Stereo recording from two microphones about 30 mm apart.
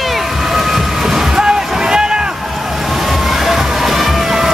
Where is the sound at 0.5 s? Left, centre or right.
Centre.